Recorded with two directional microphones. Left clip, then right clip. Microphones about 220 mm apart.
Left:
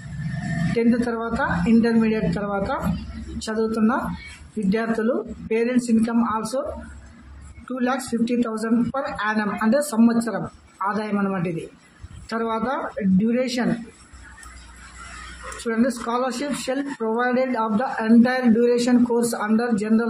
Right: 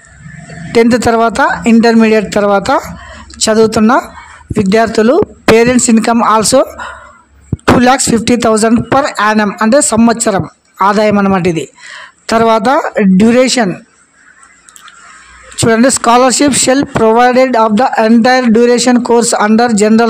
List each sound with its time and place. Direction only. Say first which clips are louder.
0.7 s speech: right 15 dB; 50° right (ahead or behind)
7.8 s speech: right 15 dB; 50° right (ahead or behind)
15.6 s speech: right 16 dB; 50° right (ahead or behind)